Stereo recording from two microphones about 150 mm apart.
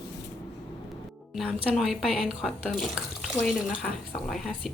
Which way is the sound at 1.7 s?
Centre (ahead or behind).